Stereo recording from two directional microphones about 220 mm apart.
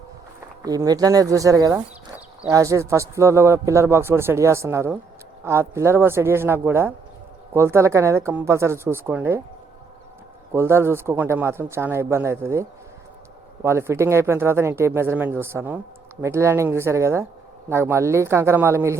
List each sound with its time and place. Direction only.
0.6 s a man's voice: 15° right (ahead or behind)
10.5 s a man's voice: 10° right (ahead or behind)